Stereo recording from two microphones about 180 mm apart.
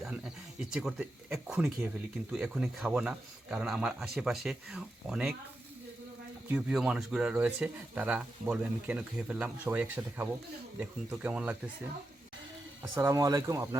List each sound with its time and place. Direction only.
0.7 s speech: 5° right (ahead or behind)
6.5 s speech: 5° right (ahead or behind)
13.0 s speech: 20° right (ahead or behind)